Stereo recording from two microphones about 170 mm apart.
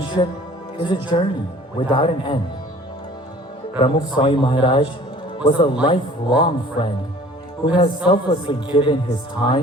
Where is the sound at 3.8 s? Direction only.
30° left (ahead or behind).